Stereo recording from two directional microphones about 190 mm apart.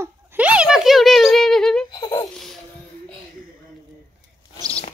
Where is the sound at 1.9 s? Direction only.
20° left (ahead or behind).